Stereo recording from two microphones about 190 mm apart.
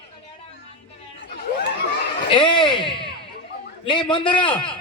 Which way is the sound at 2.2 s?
25° left (ahead or behind).